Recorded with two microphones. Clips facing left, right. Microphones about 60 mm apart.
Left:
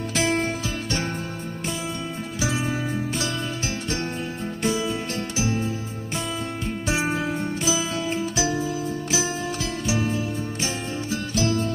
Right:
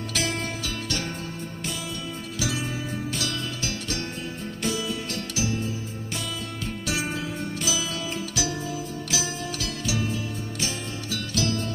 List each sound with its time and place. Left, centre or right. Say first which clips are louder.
2.4 s music: left 4 dB; left
6.9 s music: left 5 dB; left
10.0 s music: left 4 dB; left